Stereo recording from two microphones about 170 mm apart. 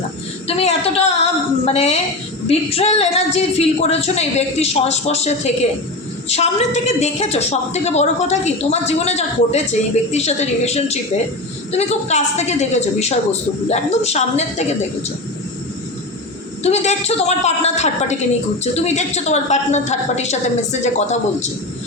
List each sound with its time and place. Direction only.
0.4 s a sound: 35° left (ahead or behind)
2.5 s a woman's voice: 35° left (ahead or behind)
16.6 s a woman's voice: 40° left (ahead or behind)